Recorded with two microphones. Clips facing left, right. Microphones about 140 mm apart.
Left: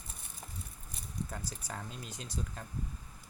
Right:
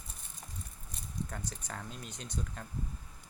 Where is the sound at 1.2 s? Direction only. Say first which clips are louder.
Even; 5° left (ahead or behind).